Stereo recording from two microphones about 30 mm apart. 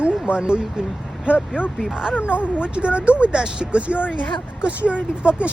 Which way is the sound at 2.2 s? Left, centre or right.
Right.